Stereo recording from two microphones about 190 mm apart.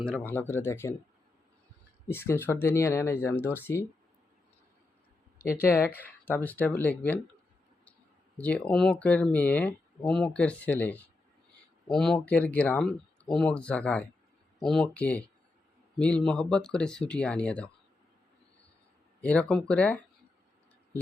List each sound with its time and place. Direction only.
0.0 s speech: 5° left (ahead or behind)
2.0 s speech: 10° left (ahead or behind)
5.5 s speech: 10° left (ahead or behind)
8.4 s speech: 5° left (ahead or behind)
19.2 s speech: 5° left (ahead or behind)